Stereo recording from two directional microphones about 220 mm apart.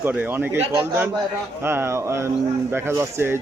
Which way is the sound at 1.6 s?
10° right (ahead or behind).